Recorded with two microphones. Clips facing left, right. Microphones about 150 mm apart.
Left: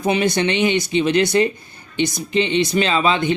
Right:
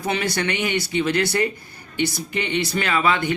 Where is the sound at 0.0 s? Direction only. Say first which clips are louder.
Left 6 dB; 20° left (ahead or behind).